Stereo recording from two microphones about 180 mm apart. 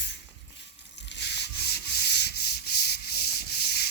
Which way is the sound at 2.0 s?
65° left (ahead or behind).